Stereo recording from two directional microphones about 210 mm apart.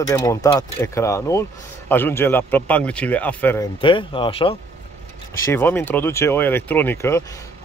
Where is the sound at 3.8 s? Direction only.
25° left (ahead or behind).